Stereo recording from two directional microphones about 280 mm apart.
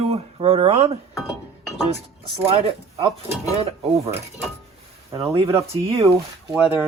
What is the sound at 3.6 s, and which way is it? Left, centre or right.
Speech, right.